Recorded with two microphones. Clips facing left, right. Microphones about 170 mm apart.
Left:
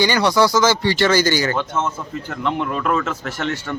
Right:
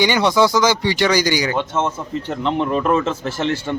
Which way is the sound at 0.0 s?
20° right (ahead or behind).